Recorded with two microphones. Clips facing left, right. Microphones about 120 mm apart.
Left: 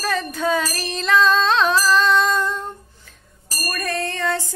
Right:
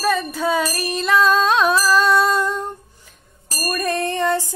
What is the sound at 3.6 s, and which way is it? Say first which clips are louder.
Music: right 4 dB; 20° right (ahead or behind).